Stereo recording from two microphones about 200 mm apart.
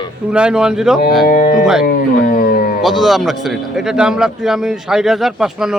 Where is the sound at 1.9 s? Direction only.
45° left (ahead or behind).